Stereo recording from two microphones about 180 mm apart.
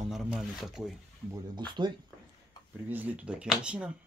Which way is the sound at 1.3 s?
25° right (ahead or behind).